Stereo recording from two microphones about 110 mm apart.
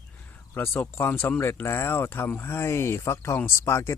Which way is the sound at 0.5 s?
20° left (ahead or behind).